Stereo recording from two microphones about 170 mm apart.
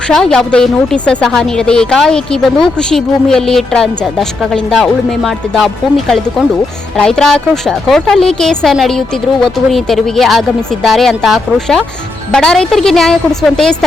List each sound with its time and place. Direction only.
0.1 s a woman's voice: 5° left (ahead or behind)